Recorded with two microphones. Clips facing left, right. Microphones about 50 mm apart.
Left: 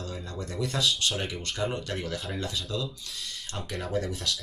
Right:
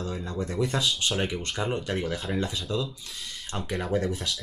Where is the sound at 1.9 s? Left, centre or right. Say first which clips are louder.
Right 4 dB; centre.